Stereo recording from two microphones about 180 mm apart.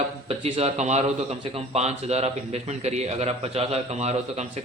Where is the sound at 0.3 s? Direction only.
35° right (ahead or behind).